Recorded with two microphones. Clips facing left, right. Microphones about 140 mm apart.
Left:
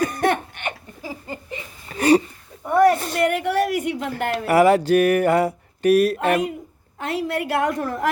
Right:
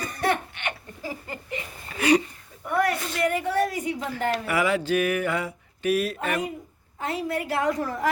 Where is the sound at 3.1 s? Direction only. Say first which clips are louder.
Left 4 dB; 70° left (ahead or behind).